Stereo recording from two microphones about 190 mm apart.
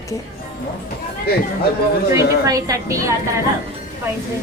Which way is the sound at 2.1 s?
15° right (ahead or behind).